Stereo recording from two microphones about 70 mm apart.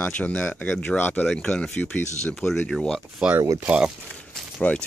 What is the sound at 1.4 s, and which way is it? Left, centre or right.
Speech, centre.